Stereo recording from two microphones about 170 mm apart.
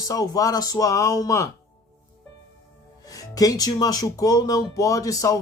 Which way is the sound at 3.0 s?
20° left (ahead or behind).